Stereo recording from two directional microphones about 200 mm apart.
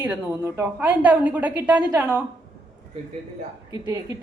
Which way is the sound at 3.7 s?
20° right (ahead or behind).